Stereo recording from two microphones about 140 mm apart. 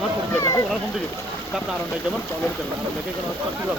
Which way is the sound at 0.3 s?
20° left (ahead or behind).